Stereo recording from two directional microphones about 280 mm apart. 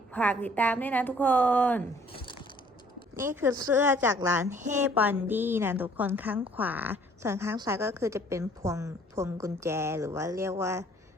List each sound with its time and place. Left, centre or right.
0.1 s a woman's voice: centre
2.2 s crushing: centre
3.2 s speech: centre